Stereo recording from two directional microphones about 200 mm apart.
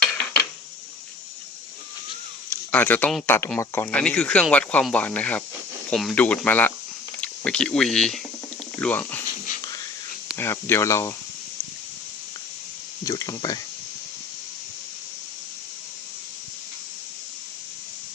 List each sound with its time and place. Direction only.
2.5 s speech: 10° left (ahead or behind)
10.3 s speech: 10° left (ahead or behind)
13.1 s speech: 15° left (ahead or behind)